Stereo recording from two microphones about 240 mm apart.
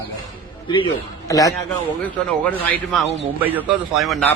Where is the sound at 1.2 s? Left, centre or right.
Centre.